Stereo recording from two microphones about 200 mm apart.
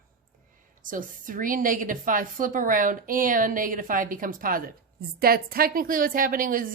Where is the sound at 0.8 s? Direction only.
40° right (ahead or behind).